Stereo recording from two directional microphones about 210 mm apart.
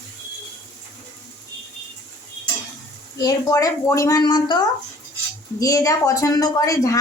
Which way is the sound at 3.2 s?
15° left (ahead or behind).